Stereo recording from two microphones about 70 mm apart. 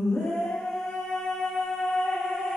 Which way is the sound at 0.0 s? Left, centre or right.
Centre.